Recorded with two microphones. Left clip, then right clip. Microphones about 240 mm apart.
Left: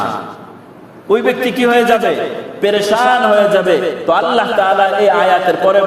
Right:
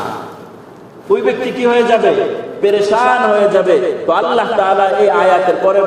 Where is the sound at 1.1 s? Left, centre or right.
Left.